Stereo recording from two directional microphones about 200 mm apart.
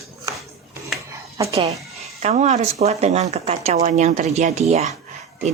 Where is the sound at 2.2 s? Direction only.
35° right (ahead or behind).